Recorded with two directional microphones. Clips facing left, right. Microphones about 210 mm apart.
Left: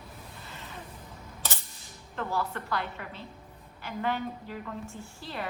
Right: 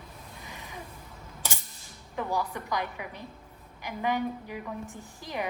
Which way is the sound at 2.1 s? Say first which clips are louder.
Right 1 dB; 15° right (ahead or behind).